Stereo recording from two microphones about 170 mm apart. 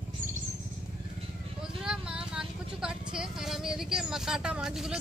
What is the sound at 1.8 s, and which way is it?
Vehicle, 5° right (ahead or behind).